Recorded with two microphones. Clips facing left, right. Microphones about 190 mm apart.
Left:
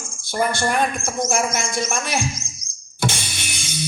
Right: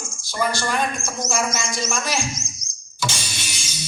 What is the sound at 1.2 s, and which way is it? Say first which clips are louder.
Speech: left 1 dB; 55° left (ahead or behind).